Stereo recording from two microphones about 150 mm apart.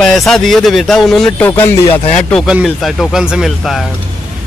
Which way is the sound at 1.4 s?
15° left (ahead or behind).